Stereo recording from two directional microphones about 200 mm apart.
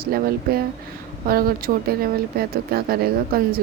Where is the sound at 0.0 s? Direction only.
50° right (ahead or behind).